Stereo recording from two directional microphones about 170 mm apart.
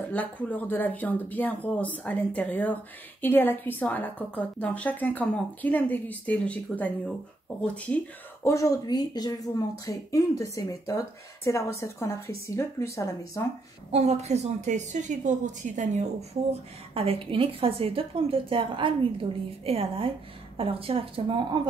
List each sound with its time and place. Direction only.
0.1 s speech: 10° left (ahead or behind)
8.5 s speech: 20° left (ahead or behind)
13.9 s a woman's voice: 40° right (ahead or behind)